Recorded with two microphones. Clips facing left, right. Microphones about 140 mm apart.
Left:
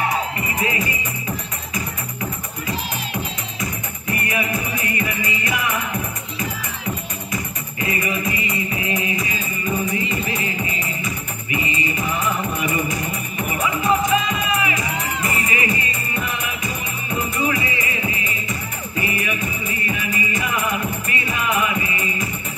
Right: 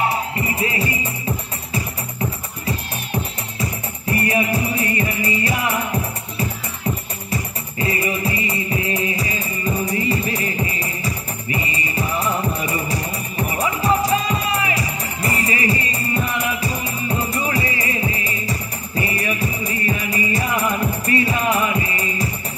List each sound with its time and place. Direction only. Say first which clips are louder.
0.1 s music: right 1 dB; 30° right (ahead or behind)
4.1 s music: right 4 dB; 30° right (ahead or behind)
7.8 s music: right 2 dB; 35° right (ahead or behind)